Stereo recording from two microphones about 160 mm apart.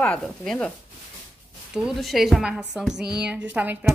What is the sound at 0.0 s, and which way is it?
Speech, 5° left (ahead or behind).